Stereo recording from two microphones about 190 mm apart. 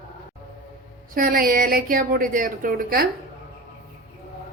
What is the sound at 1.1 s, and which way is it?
A woman's voice, 50° right (ahead or behind).